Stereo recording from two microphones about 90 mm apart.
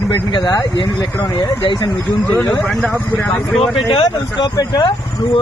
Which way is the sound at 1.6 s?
60° left (ahead or behind).